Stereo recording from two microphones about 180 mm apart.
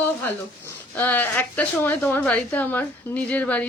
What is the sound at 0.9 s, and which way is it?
A woman's voice, 10° left (ahead or behind).